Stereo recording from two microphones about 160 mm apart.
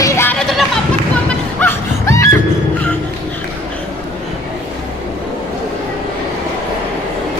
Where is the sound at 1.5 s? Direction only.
15° left (ahead or behind).